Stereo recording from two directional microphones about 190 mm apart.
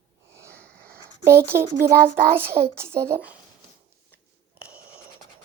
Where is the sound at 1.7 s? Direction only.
55° right (ahead or behind).